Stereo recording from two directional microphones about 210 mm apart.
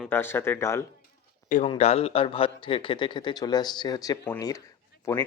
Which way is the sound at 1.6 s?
30° left (ahead or behind).